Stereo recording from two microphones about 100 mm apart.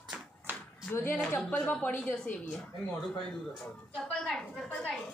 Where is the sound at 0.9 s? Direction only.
25° left (ahead or behind).